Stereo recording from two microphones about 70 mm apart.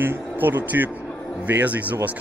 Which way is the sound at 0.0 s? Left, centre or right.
Right.